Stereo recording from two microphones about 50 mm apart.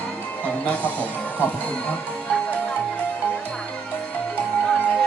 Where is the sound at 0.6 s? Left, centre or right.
Left.